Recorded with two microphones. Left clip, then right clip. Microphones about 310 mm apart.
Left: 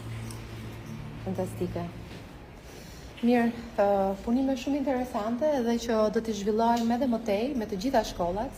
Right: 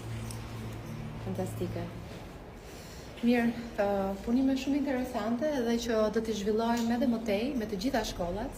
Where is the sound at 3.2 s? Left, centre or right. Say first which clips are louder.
Left 3 dB; centre.